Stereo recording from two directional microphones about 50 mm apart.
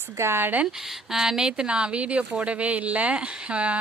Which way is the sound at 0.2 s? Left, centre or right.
Right.